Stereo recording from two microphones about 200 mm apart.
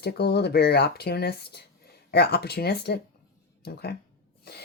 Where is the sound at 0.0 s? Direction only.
55° left (ahead or behind).